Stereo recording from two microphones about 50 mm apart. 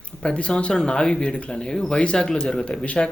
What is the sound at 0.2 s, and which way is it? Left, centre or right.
Speech, left.